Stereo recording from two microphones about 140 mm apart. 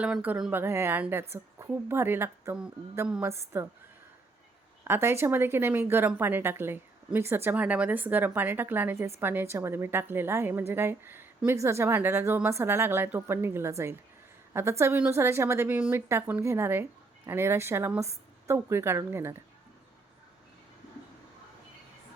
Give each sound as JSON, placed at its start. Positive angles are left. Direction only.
{"t": 0.0, "sound": "a woman's voice", "side_deg": -10}
{"t": 4.8, "sound": "a woman's voice", "side_deg": -20}